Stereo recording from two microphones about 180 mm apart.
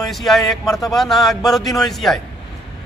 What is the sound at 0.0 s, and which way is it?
A man's voice, centre (ahead or behind).